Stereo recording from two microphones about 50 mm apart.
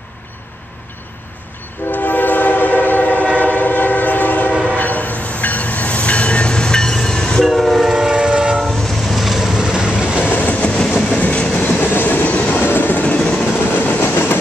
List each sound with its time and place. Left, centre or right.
1.9 s train: left; by 7.2 s centre
7.4 s train: centre
7.9 s train: centre
8.6 s vehicle: centre
9.6 s vehicle: centre
10.2 s train: left
11.8 s train: left
14.0 s train: left